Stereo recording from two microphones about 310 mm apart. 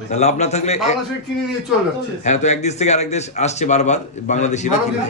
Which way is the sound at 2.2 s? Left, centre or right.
Left.